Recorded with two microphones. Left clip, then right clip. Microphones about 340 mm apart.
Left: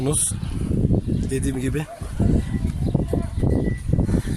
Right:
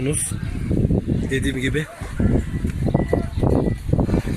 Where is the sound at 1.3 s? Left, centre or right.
Centre.